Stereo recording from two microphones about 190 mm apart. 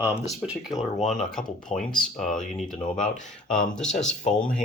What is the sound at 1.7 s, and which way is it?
Speech, 35° left (ahead or behind).